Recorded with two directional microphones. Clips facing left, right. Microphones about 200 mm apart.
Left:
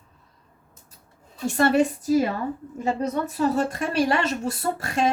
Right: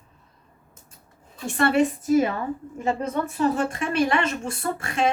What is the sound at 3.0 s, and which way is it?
A woman's voice, 40° left (ahead or behind).